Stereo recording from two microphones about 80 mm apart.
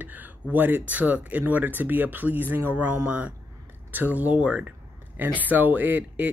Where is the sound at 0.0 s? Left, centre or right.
Right.